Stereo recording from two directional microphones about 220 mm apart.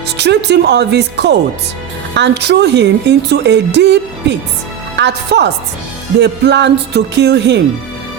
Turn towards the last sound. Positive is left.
turn(degrees=-50)  # may be behind; listen again after turning